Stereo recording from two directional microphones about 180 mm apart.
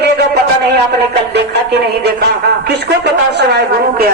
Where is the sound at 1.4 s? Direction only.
65° right (ahead or behind).